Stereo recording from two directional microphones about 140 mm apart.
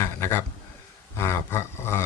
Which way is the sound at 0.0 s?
15° left (ahead or behind).